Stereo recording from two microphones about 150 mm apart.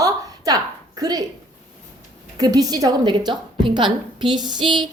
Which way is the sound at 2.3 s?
25° right (ahead or behind).